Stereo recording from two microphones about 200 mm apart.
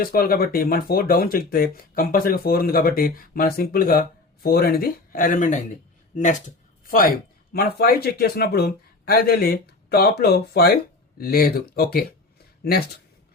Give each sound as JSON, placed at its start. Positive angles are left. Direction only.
{"t": 0.0, "sound": "speech", "side_deg": 50}